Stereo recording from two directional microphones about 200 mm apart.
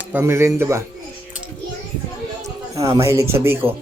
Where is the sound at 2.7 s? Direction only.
15° right (ahead or behind).